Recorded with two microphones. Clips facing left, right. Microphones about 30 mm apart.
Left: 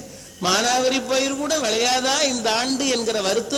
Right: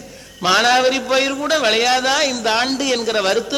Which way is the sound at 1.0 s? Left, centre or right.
Right.